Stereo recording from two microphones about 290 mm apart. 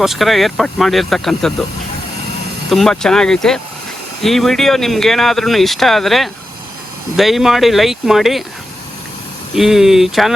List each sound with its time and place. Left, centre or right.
0.0 s speech: centre
2.6 s speech: centre
9.6 s speech: centre